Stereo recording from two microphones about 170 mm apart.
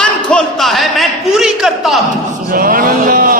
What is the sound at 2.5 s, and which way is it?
Speech, 55° right (ahead or behind).